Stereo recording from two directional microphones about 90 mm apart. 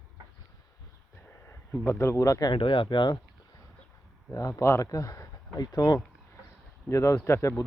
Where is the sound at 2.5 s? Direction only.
75° left (ahead or behind); by 3.2 s 55° left (ahead or behind).